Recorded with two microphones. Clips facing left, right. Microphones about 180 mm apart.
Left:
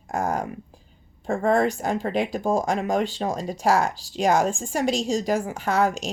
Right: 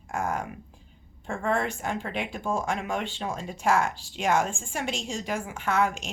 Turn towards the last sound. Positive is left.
turn(degrees=35)  # may be behind; listen again after turning